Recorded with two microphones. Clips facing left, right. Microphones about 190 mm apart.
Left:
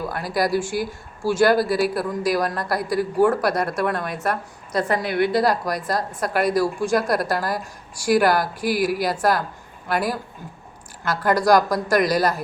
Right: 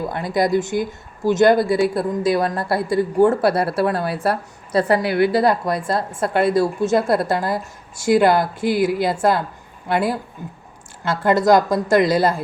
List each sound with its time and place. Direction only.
0.0 s speech: 20° right (ahead or behind)
5.0 s a woman's voice: 5° right (ahead or behind)
5.5 s speech: 25° right (ahead or behind)